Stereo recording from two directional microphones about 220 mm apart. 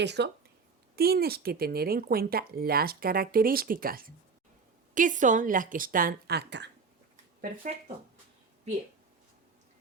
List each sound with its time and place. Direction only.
0.0 s a woman's voice: 50° right (ahead or behind)